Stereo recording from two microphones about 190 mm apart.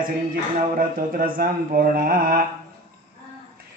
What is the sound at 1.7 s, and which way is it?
Speech, 50° right (ahead or behind).